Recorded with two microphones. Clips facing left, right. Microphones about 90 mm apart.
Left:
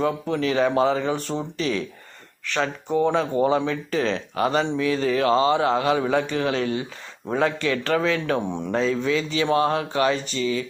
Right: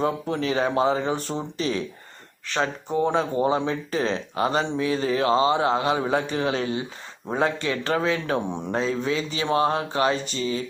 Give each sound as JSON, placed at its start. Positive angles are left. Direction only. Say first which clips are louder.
{"t": 0.0, "sound": "speech", "louder": "left 2 dB", "side_deg": -30}